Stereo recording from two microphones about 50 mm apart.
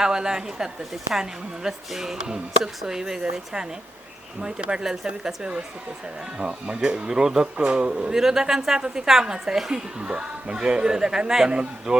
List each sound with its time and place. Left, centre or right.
0.0 s a man's voice: centre
8.1 s a man's voice: centre